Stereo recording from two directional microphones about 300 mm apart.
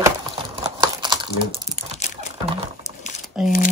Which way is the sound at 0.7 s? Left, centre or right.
Centre.